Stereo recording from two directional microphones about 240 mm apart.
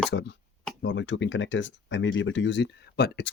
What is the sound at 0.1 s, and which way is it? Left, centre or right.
Speech, left.